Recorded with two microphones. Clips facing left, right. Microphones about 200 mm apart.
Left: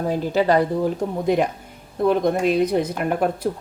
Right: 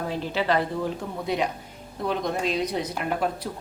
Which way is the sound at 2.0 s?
50° left (ahead or behind).